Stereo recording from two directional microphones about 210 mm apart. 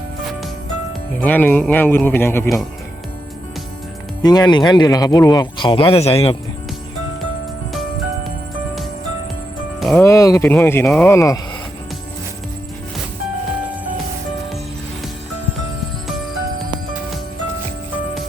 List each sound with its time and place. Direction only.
1.2 s speech: 10° left (ahead or behind)
4.2 s speech: 20° left (ahead or behind)
7.7 s music: centre (ahead or behind)
9.8 s speech: 10° left (ahead or behind)